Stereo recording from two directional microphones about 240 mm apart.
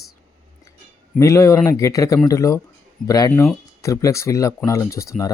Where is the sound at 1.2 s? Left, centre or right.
Centre.